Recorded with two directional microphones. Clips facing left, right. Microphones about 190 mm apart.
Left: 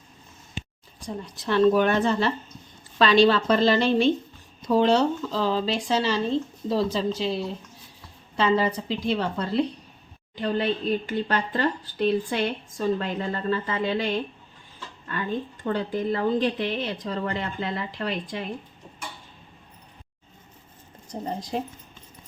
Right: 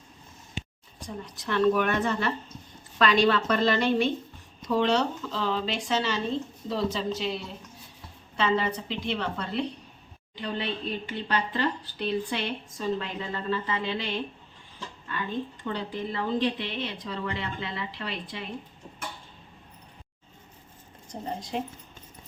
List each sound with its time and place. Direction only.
1.0 s a woman's voice: 30° left (ahead or behind); by 14.1 s 45° left (ahead or behind)
15.6 s a woman's voice: 45° left (ahead or behind)
21.1 s speech: 35° left (ahead or behind)